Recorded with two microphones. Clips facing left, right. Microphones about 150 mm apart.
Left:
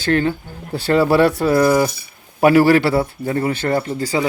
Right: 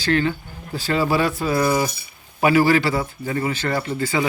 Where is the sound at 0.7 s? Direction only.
60° left (ahead or behind).